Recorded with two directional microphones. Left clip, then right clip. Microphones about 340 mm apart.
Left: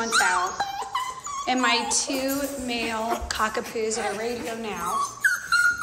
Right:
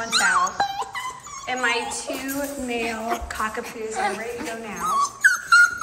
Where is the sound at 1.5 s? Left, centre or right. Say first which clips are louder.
Left 1 dB; centre.